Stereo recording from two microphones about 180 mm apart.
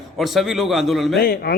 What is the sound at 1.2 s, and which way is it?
Speech, 55° left (ahead or behind).